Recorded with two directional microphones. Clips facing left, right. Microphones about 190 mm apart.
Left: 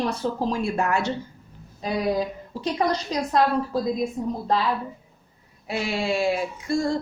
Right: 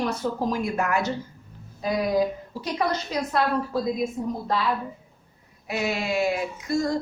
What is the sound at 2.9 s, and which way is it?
Speech, 35° left (ahead or behind).